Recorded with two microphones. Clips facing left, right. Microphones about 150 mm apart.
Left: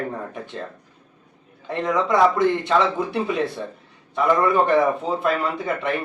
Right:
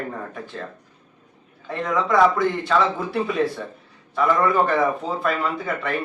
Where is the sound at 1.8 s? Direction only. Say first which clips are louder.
Even; 20° left (ahead or behind).